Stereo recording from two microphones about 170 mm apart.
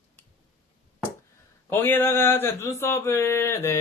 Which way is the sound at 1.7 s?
10° left (ahead or behind).